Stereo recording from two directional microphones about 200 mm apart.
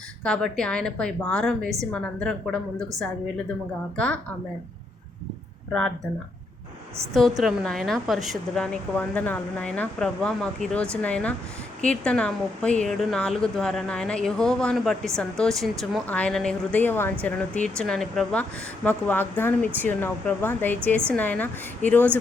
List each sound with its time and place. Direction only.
0.3 s a woman's voice: 5° left (ahead or behind)
3.9 s a woman's voice: 5° left (ahead or behind)
7.1 s a woman's voice: centre (ahead or behind)